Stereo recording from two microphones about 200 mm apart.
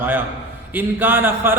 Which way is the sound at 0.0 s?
10° right (ahead or behind).